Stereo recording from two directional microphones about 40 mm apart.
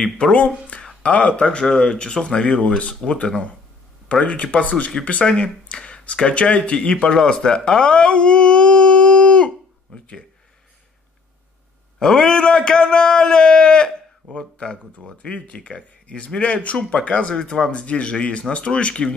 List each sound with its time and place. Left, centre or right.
0.0 s speech: left
1.4 s speech: centre
2.4 s speech: left
7.0 s speech: centre
9.9 s a sound: left
12.0 s a man's voice: centre
15.2 s speech: left